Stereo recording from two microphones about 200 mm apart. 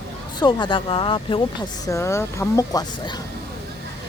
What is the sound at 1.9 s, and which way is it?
Speech, 15° left (ahead or behind).